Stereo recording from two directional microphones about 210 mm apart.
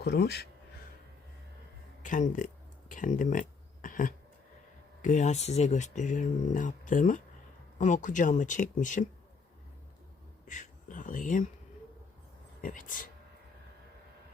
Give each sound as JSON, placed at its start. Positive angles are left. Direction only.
{"t": 0.0, "sound": "speech", "side_deg": 50}
{"t": 2.0, "sound": "speech", "side_deg": 35}
{"t": 10.4, "sound": "speech", "side_deg": 35}